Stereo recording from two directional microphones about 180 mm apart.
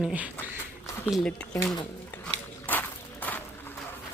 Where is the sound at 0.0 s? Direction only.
5° right (ahead or behind).